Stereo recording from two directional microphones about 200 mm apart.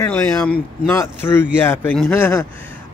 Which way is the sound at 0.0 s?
5° left (ahead or behind).